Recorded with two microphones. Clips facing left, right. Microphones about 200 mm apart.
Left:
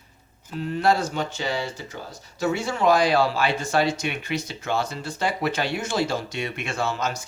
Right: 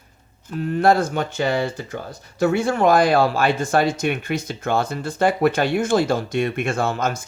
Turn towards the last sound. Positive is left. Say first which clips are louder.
# right 5 dB
turn(degrees=-50)  # may be behind; listen again after turning